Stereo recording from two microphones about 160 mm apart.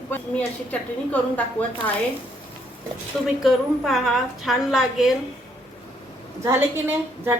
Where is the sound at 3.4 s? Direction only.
Centre (ahead or behind).